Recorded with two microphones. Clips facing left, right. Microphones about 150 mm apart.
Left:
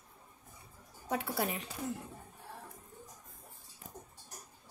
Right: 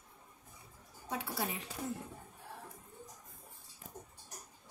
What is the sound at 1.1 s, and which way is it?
Speech, 60° left (ahead or behind).